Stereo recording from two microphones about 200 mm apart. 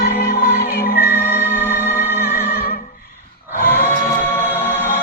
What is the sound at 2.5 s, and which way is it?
Music, 50° left (ahead or behind).